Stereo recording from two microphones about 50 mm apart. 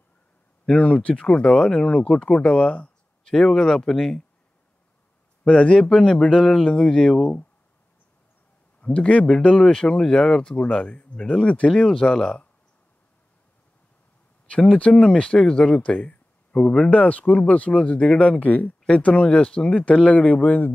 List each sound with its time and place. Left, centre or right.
0.7 s speech: left
3.3 s speech: centre
5.4 s speech: centre
8.8 s speech: left
11.7 s speech: centre
14.8 s speech: left
16.9 s speech: left